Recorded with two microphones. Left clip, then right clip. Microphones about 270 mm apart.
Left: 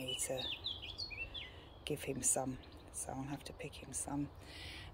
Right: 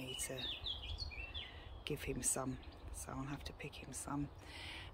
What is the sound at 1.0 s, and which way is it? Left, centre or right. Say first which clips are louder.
Chirp: left 4 dB; right.